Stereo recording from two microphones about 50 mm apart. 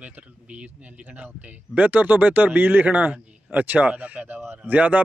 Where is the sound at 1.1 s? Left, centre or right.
Right.